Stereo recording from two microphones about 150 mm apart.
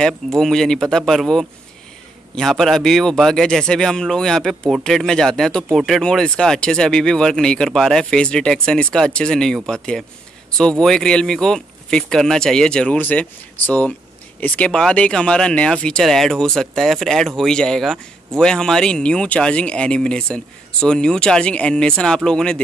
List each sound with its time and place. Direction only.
0.0 s a man's voice: centre (ahead or behind)